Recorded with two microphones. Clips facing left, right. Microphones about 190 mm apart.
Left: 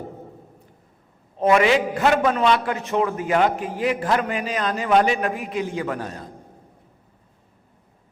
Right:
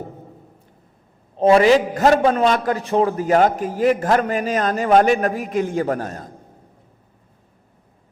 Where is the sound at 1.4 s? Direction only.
30° right (ahead or behind); by 6.3 s 45° right (ahead or behind).